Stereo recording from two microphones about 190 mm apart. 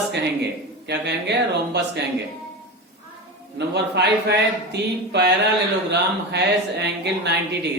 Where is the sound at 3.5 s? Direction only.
60° right (ahead or behind).